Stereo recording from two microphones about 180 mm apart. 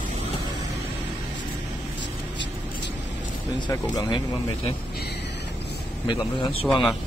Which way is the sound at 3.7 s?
20° left (ahead or behind).